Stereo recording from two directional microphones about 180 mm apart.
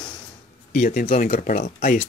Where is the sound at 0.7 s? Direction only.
50° left (ahead or behind).